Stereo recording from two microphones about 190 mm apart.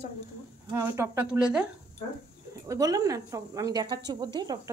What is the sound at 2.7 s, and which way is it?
A woman's voice, 20° right (ahead or behind).